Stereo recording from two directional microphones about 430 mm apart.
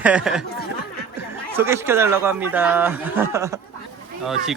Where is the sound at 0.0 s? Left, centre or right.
Centre.